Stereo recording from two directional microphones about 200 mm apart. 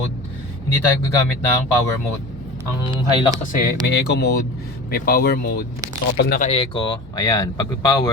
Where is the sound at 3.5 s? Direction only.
55° left (ahead or behind).